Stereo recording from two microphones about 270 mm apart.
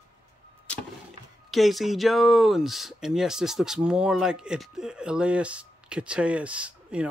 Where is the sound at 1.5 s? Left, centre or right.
Centre.